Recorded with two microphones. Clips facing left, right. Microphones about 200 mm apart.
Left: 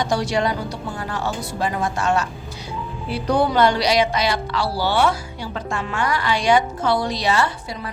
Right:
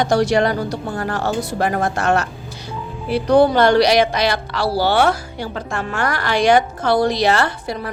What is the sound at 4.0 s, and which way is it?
A woman's voice, 65° right (ahead or behind).